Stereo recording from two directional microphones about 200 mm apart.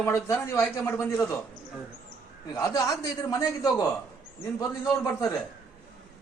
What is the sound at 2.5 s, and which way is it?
A man's voice, 20° left (ahead or behind).